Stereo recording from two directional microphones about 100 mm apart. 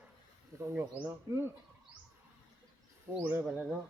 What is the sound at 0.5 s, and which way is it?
Speech, 30° right (ahead or behind).